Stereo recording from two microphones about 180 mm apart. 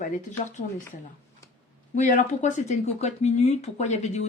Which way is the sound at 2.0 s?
45° left (ahead or behind).